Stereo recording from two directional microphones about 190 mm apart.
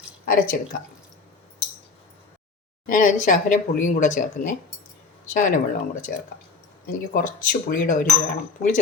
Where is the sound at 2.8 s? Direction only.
45° left (ahead or behind).